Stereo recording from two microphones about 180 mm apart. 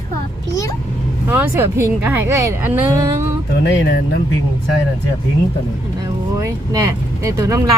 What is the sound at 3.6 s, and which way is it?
Speech, 70° left (ahead or behind).